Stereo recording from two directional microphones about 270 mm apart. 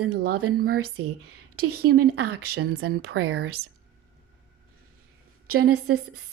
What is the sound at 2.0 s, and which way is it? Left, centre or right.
Speech, right.